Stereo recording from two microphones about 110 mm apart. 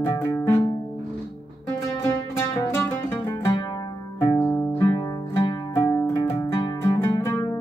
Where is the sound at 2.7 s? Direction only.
25° left (ahead or behind).